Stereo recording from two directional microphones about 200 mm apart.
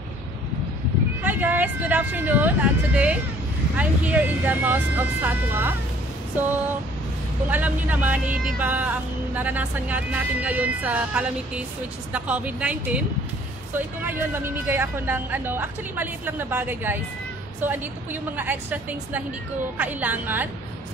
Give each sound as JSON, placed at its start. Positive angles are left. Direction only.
{"t": 1.2, "sound": "speech", "side_deg": -10}
{"t": 7.4, "sound": "speech", "side_deg": -10}